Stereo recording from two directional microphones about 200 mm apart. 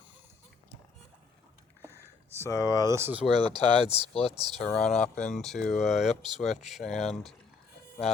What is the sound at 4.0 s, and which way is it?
Speech, 30° left (ahead or behind).